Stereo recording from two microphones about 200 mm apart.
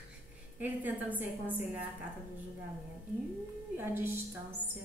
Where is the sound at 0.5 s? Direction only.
10° right (ahead or behind).